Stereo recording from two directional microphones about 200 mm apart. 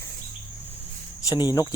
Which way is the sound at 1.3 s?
20° left (ahead or behind).